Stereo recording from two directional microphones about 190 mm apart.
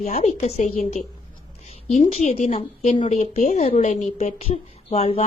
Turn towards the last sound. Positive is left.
turn(degrees=30)  # may be behind; listen again after turning